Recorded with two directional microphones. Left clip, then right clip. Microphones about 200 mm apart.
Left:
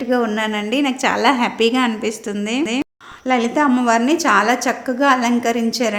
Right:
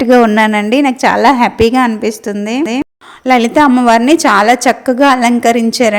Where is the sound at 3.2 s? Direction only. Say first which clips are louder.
Right 8 dB; 40° right (ahead or behind).